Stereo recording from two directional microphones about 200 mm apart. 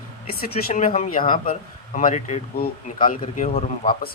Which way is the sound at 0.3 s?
35° left (ahead or behind).